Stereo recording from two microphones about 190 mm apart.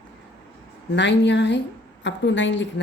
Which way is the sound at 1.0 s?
65° left (ahead or behind).